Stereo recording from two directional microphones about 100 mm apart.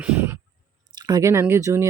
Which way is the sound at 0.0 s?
20° right (ahead or behind).